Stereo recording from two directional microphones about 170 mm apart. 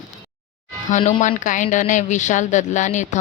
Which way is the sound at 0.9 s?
45° left (ahead or behind).